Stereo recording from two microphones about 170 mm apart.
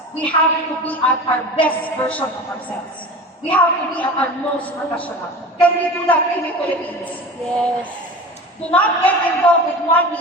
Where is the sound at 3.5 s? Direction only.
10° left (ahead or behind).